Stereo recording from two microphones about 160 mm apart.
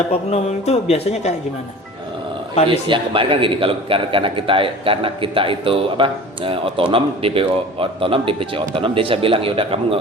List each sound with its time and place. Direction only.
0.3 s speech: 40° left (ahead or behind)
2.6 s a man's voice: 30° right (ahead or behind)